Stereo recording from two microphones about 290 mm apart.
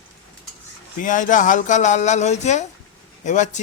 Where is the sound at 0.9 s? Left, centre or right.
Left.